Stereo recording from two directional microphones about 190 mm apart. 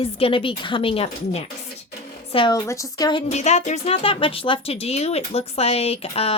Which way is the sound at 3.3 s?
35° left (ahead or behind).